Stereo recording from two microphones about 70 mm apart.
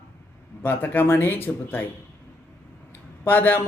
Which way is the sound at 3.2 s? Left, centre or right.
Left.